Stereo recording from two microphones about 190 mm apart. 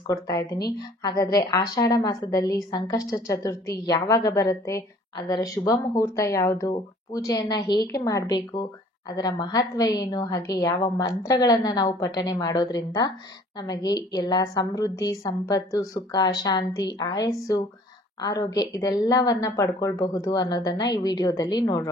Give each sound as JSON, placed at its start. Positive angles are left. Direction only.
{"t": 0.0, "sound": "a woman's voice", "side_deg": 20}